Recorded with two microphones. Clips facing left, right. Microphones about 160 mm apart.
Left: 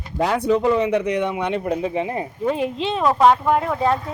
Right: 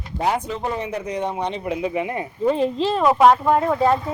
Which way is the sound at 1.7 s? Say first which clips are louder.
Left 1 dB; 35° left (ahead or behind).